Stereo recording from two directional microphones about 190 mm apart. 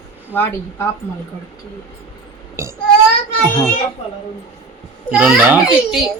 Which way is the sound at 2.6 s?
15° right (ahead or behind).